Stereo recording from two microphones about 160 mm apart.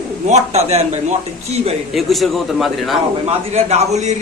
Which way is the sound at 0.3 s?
40° right (ahead or behind).